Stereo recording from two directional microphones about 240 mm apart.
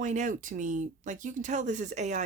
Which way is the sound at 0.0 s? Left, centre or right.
Right.